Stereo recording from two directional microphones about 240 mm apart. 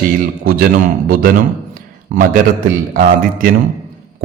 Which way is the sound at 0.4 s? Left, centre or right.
Right.